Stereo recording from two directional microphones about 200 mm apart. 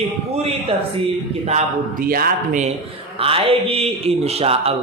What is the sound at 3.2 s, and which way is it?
Speech, 30° right (ahead or behind).